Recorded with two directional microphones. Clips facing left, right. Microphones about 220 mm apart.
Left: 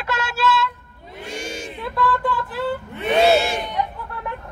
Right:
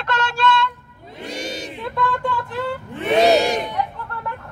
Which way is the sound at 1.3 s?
35° right (ahead or behind).